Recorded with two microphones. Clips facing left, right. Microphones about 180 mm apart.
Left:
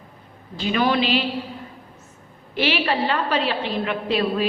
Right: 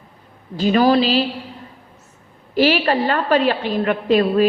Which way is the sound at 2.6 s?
40° right (ahead or behind).